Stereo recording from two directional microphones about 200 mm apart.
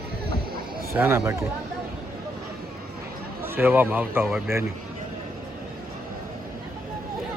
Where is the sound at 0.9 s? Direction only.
10° right (ahead or behind).